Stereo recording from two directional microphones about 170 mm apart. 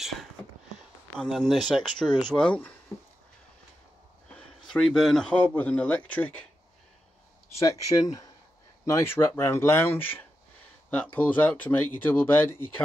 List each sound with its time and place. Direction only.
1.1 s speech: 5° left (ahead or behind)
4.7 s speech: centre (ahead or behind)
7.5 s speech: 20° left (ahead or behind)